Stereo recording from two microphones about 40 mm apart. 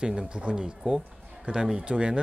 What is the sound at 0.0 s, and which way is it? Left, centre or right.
Speech, centre.